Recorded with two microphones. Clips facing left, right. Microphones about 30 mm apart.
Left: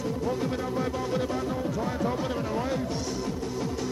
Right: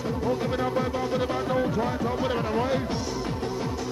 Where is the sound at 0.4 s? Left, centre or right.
Right.